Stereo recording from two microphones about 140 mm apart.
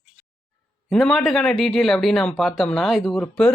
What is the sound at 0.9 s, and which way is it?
Speech, centre (ahead or behind).